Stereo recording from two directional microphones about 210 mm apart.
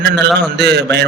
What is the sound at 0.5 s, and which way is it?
Speech, 55° right (ahead or behind).